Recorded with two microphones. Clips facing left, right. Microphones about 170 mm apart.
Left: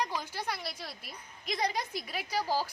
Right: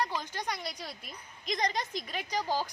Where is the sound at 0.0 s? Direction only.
10° left (ahead or behind).